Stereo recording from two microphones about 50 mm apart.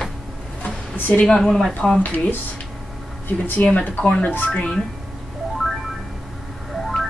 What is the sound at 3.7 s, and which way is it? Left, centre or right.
Speech, left.